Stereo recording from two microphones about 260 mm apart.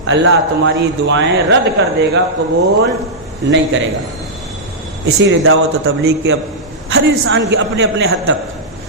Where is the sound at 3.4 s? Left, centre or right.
Right.